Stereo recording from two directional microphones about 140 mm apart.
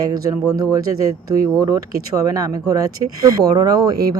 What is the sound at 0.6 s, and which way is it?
Speech, 25° right (ahead or behind).